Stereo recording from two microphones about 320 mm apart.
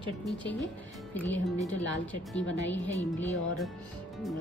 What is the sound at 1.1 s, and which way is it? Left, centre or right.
Speech, centre.